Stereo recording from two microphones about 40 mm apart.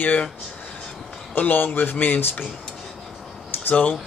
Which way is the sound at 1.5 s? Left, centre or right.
Left.